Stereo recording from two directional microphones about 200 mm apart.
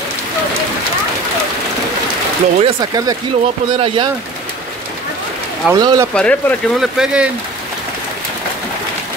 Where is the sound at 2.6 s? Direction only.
20° right (ahead or behind).